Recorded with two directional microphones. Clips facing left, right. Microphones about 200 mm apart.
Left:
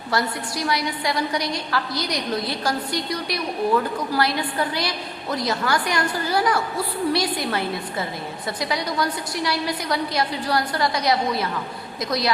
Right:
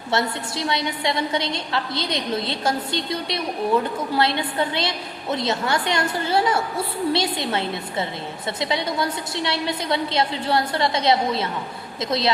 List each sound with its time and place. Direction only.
0.1 s a woman's voice: 25° right (ahead or behind)